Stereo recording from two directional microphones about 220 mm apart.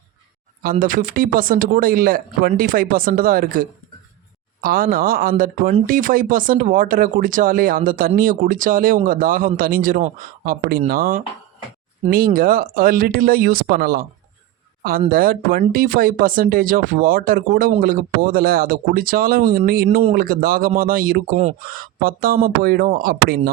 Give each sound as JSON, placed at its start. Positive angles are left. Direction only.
{"t": 0.6, "sound": "speech", "side_deg": -40}
{"t": 15.1, "sound": "speech", "side_deg": -40}